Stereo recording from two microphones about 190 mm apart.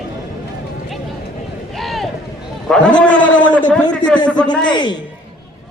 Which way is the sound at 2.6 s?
5° left (ahead or behind).